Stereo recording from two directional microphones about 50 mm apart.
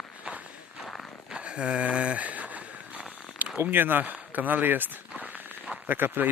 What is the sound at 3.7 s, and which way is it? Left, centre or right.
Speech, right.